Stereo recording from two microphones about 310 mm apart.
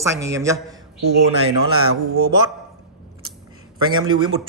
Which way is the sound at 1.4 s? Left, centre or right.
Right.